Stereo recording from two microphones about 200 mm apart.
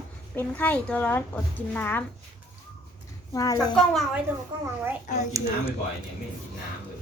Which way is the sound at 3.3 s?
15° left (ahead or behind).